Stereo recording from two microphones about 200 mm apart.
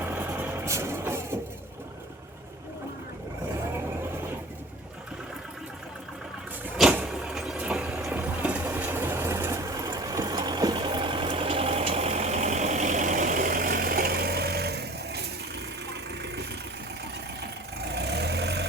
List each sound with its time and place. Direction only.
0.0 s vehicle: 10° right (ahead or behind)
6.7 s vehicle: 5° right (ahead or behind); by 18.6 s 55° right (ahead or behind)